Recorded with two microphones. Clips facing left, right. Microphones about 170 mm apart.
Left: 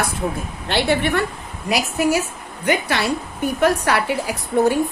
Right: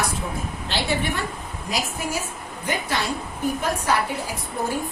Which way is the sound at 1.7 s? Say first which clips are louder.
Left 9 dB; 75° left (ahead or behind).